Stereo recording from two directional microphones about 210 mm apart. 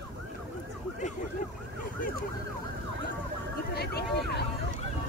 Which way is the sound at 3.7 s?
50° left (ahead or behind).